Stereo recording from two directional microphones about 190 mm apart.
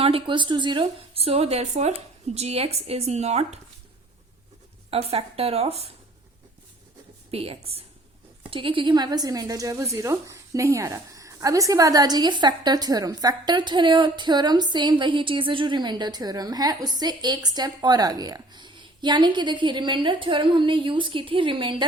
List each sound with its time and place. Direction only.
0.0 s a woman's voice: 25° right (ahead or behind)
4.9 s a woman's voice: 30° right (ahead or behind)
7.3 s a woman's voice: 30° right (ahead or behind)